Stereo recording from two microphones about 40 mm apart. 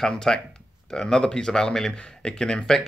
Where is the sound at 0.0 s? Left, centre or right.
Centre.